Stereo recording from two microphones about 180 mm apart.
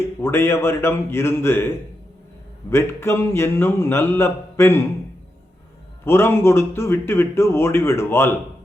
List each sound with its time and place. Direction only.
0.0 s a man's voice: 15° left (ahead or behind)
6.1 s a man's voice: 15° left (ahead or behind)